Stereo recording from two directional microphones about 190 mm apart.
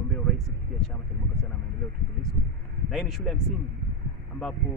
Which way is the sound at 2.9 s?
Centre (ahead or behind).